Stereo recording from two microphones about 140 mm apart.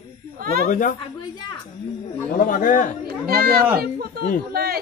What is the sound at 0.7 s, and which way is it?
Speech, 70° left (ahead or behind).